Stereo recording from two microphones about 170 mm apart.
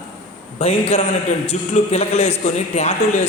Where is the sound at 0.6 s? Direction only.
35° left (ahead or behind).